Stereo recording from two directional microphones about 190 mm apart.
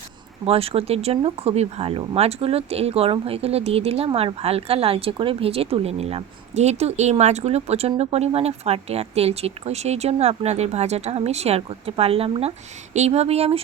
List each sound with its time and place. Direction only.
0.4 s speech: 30° right (ahead or behind)